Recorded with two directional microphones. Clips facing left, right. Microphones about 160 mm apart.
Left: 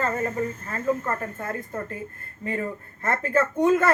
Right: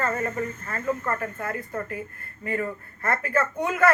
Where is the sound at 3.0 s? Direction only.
20° left (ahead or behind).